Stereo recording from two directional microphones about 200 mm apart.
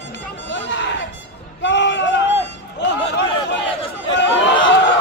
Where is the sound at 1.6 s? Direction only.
60° left (ahead or behind).